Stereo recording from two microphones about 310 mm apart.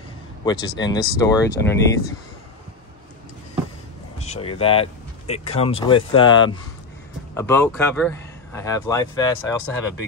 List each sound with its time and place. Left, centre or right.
0.5 s speech: centre
4.2 s speech: centre